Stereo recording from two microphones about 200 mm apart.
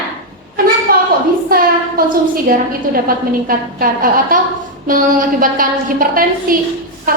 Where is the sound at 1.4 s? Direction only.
45° right (ahead or behind).